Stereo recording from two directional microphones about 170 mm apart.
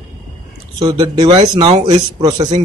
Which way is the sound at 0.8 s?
25° right (ahead or behind).